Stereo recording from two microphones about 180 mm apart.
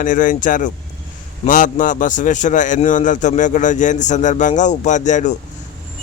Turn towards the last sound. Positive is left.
turn(degrees=45)  # may be behind; listen again after turning